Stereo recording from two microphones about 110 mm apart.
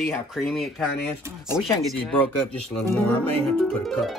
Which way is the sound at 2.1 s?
15° left (ahead or behind).